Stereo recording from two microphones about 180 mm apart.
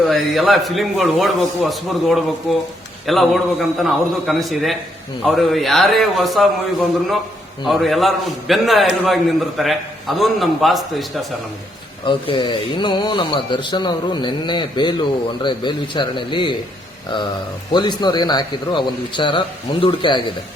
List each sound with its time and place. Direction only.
0.0 s a man's voice: centre (ahead or behind)
7.6 s a man's voice: centre (ahead or behind)
12.0 s speech: 25° left (ahead or behind)